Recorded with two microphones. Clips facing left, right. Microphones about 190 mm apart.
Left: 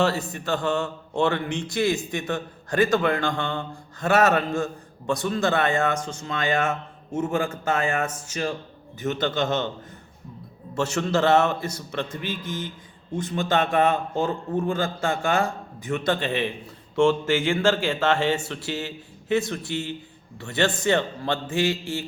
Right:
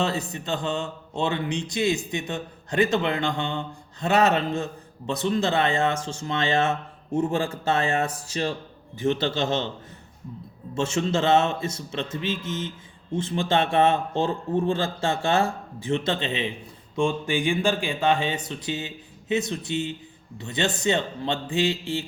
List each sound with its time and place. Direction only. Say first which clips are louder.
0.0 s speech: left 3 dB; 20° right (ahead or behind)
11.1 s speech: left 2 dB; 20° right (ahead or behind)